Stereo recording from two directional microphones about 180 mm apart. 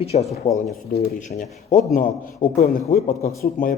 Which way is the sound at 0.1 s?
40° left (ahead or behind).